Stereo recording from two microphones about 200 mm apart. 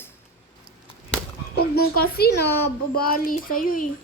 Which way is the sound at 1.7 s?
50° left (ahead or behind).